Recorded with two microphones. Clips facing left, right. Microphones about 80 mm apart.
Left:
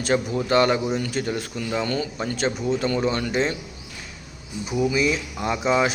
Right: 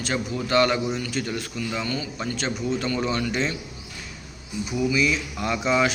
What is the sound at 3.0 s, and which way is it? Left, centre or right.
Speech, left.